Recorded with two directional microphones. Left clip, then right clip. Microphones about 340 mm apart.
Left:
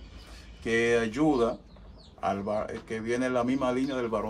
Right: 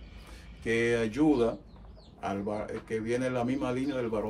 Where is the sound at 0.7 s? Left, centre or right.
Centre.